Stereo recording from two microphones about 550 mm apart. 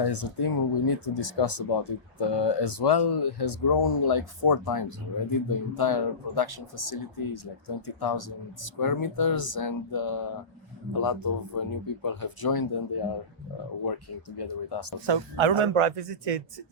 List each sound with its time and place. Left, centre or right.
0.0 s speech: left
14.3 s speech: left
15.0 s a man's voice: right